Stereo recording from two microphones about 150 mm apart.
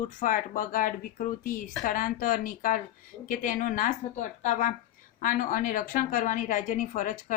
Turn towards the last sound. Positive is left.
turn(degrees=55)  # may be behind; listen again after turning